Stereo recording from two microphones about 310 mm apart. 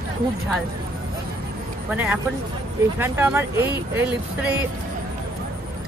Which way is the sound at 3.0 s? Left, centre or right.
Centre.